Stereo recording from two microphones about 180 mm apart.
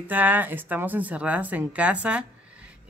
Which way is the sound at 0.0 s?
10° right (ahead or behind).